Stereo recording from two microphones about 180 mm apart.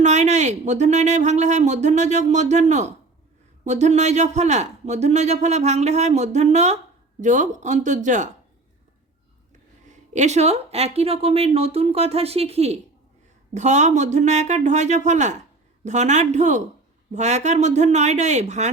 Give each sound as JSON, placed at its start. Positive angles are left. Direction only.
{"t": 0.0, "sound": "speech", "side_deg": -40}
{"t": 9.8, "sound": "speech", "side_deg": -40}